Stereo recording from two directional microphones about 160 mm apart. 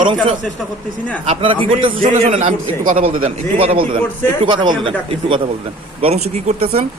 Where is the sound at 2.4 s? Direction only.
55° right (ahead or behind).